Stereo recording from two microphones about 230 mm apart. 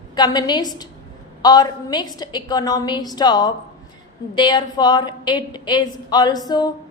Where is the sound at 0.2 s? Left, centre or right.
Centre.